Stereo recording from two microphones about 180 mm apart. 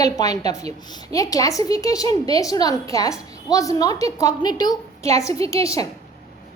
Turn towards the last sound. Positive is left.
turn(degrees=20)  # may be behind; listen again after turning